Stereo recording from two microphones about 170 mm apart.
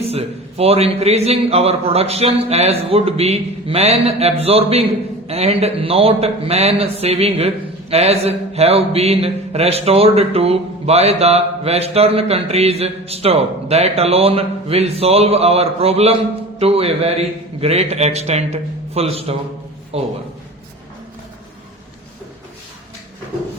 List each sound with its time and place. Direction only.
0.0 s a man's voice: 35° right (ahead or behind)